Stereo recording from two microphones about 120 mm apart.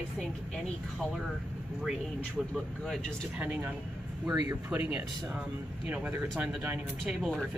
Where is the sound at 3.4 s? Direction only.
15° right (ahead or behind).